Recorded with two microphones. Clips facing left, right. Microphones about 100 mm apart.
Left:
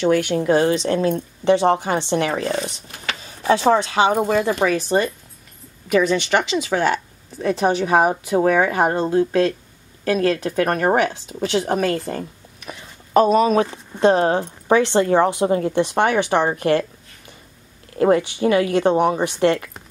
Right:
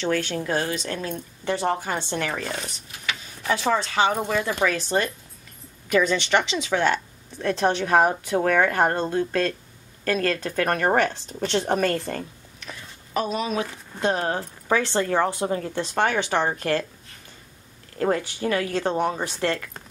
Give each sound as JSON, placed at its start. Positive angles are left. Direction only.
{"t": 0.0, "sound": "speech", "side_deg": 15}
{"t": 3.7, "sound": "speech", "side_deg": 15}
{"t": 4.1, "sound": "speech", "side_deg": 30}
{"t": 4.6, "sound": "speech", "side_deg": 15}
{"t": 13.1, "sound": "speech", "side_deg": 45}
{"t": 13.7, "sound": "speech", "side_deg": 25}
{"t": 17.9, "sound": "speech", "side_deg": 20}